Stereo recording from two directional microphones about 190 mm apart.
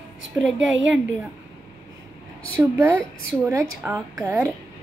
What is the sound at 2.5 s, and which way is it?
A woman's voice, 10° right (ahead or behind).